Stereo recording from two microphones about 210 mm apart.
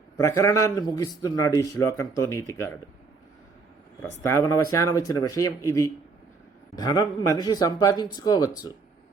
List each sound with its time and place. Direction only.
0.2 s a man's voice: 15° left (ahead or behind)
4.2 s a man's voice: 15° left (ahead or behind)